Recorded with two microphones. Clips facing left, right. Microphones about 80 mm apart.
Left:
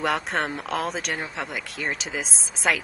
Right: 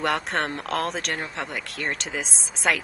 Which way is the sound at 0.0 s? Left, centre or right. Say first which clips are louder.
Even; centre.